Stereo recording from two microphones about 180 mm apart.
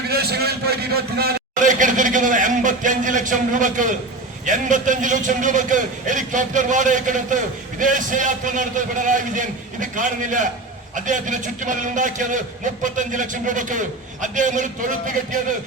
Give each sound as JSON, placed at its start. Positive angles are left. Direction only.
{"t": 0.1, "sound": "a man's voice", "side_deg": -60}